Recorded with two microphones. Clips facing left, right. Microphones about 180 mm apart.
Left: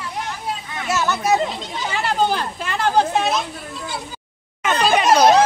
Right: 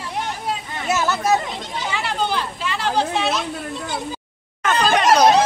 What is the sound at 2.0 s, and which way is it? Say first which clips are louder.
Speech: left 5 dB; 45° left (ahead or behind).